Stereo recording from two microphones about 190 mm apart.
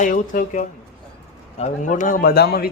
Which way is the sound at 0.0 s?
45° left (ahead or behind).